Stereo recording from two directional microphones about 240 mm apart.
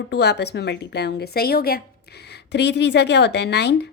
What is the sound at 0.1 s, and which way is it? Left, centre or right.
A woman's voice, left.